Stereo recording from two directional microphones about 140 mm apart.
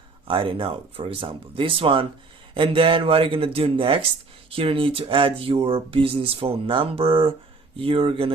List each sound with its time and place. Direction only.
0.3 s speech: 40° right (ahead or behind)